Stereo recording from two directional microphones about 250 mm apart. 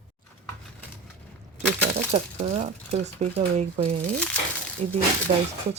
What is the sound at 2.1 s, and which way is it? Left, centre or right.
Speech, right.